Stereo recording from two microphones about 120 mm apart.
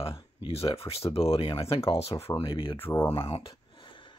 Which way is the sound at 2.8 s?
20° left (ahead or behind).